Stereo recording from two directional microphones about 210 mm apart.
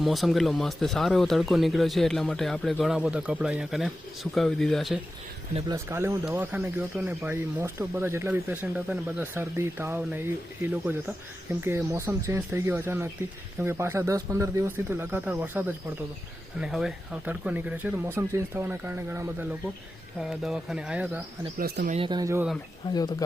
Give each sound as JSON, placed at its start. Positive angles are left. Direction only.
{"t": 0.0, "sound": "speech", "side_deg": 0}
{"t": 5.5, "sound": "speech", "side_deg": -15}
{"t": 21.6, "sound": "speech", "side_deg": -45}
{"t": 21.9, "sound": "speech", "side_deg": -20}
{"t": 22.9, "sound": "speech", "side_deg": 20}